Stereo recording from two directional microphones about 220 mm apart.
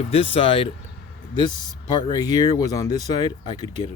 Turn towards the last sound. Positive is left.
turn(degrees=20)  # may be behind; listen again after turning